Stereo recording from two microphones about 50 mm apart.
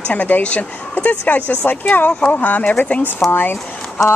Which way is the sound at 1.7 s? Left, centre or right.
Left.